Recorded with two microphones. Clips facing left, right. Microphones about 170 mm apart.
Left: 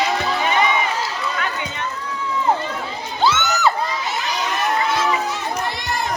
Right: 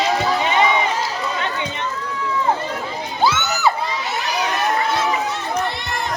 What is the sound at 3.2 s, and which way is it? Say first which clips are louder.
Crowd: left 1 dB; 10° right (ahead or behind).